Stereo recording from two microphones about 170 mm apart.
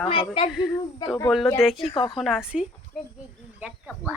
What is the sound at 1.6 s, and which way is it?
Speech, centre (ahead or behind).